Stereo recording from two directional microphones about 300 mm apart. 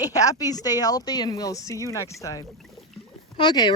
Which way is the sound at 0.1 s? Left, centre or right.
Centre.